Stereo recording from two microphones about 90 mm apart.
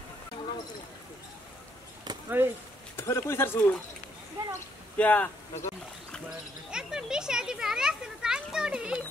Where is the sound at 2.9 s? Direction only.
30° left (ahead or behind).